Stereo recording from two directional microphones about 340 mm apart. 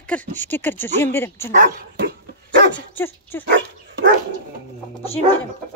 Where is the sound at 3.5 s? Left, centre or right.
Right.